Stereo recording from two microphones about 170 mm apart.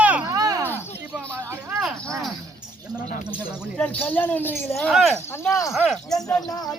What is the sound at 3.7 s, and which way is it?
Speech, 5° left (ahead or behind).